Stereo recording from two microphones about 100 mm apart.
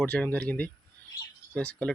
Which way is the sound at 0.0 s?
15° left (ahead or behind).